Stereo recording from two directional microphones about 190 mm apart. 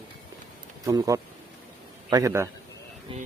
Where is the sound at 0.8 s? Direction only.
20° right (ahead or behind).